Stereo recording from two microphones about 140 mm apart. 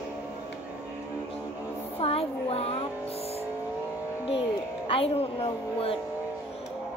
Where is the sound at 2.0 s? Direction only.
45° left (ahead or behind).